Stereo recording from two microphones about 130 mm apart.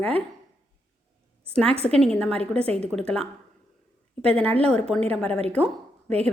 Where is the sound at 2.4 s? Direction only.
50° right (ahead or behind).